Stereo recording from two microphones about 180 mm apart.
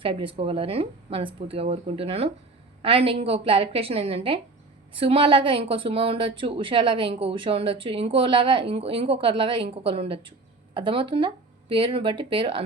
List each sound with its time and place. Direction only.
0.0 s a woman's voice: 30° right (ahead or behind)